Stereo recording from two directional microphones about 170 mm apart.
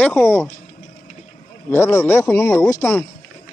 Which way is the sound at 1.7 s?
15° left (ahead or behind).